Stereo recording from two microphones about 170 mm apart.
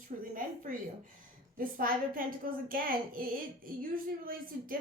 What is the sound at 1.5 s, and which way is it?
A woman's voice, 55° right (ahead or behind).